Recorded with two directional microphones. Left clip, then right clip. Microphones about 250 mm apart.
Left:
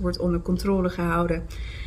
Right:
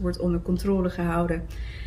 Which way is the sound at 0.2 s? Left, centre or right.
Centre.